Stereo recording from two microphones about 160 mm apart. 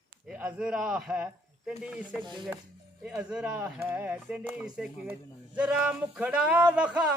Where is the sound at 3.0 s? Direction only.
10° right (ahead or behind).